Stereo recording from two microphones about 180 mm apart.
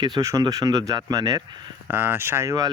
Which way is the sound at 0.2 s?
20° right (ahead or behind).